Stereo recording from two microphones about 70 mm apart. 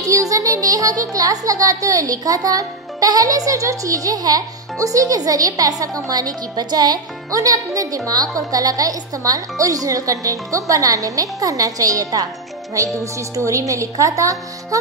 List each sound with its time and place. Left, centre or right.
0.0 s speech: right
7.3 s a woman's voice: right